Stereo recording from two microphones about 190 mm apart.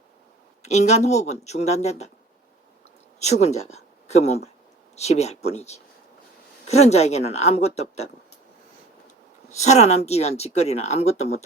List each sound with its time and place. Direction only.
0.6 s speech: 35° left (ahead or behind)
3.2 s speech: 35° left (ahead or behind)
9.5 s speech: 35° left (ahead or behind)